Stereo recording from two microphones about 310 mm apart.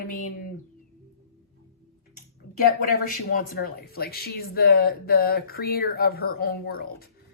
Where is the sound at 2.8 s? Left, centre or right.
Left.